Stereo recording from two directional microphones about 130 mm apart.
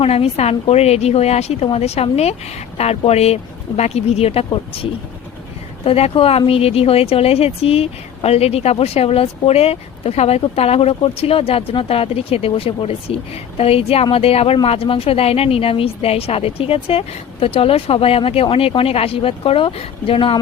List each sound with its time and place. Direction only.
0.0 s speech: 50° left (ahead or behind)